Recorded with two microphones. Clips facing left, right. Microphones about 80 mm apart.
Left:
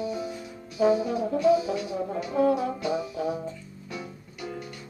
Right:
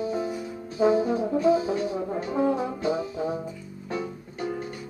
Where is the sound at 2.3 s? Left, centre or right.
Right.